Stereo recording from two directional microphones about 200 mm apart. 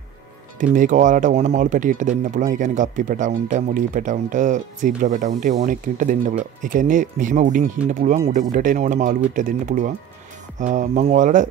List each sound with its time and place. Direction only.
0.7 s speech: 40° right (ahead or behind)